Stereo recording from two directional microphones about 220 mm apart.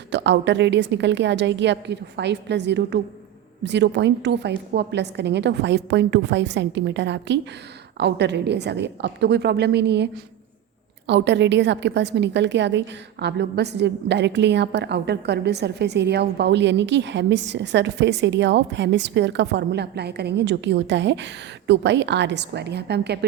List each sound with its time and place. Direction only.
0.1 s a woman's voice: 50° right (ahead or behind)